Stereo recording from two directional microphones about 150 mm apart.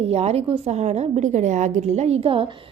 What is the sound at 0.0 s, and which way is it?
A woman's voice, 45° right (ahead or behind).